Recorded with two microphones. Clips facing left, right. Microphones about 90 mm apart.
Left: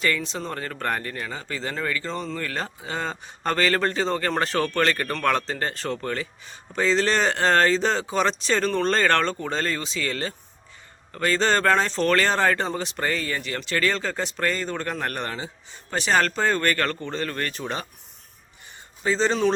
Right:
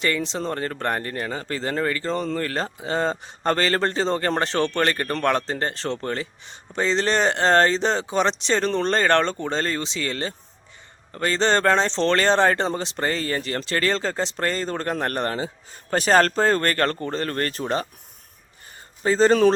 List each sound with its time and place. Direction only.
0.0 s speech: 30° right (ahead or behind)
19.0 s speech: 45° right (ahead or behind)